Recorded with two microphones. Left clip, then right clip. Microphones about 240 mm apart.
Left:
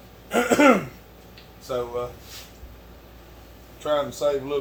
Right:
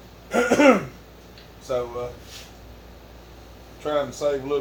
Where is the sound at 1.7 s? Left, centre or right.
Centre.